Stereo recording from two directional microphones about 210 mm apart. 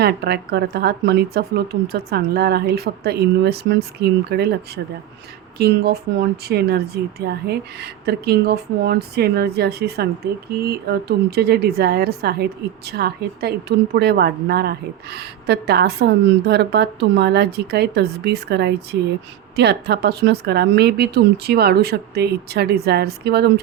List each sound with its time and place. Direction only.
0.0 s a woman's voice: 50° right (ahead or behind)